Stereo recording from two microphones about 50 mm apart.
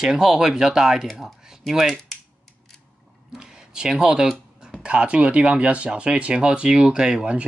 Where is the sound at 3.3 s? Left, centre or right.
Centre.